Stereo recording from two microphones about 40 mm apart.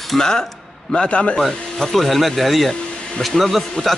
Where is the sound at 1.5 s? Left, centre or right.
Centre.